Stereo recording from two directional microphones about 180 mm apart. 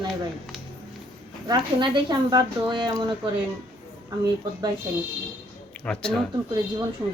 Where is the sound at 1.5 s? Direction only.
25° right (ahead or behind).